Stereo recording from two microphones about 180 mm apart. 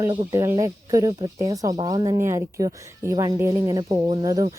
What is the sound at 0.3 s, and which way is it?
Speech, 15° right (ahead or behind).